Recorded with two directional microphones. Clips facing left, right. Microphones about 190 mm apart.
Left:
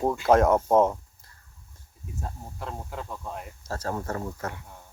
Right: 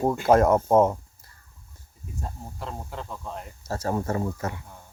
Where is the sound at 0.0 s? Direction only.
5° right (ahead or behind).